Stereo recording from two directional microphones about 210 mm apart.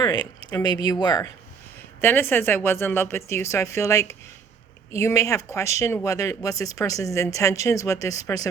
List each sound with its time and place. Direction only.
0.0 s speech: 20° left (ahead or behind)